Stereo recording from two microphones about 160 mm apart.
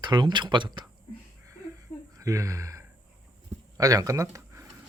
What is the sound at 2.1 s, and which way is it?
Speech, 20° right (ahead or behind).